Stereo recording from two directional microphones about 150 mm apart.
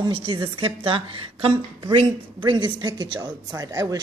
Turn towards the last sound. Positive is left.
turn(degrees=-25)  # may be behind; listen again after turning